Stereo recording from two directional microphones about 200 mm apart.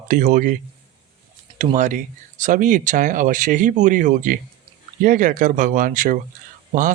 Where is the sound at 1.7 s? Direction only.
40° right (ahead or behind).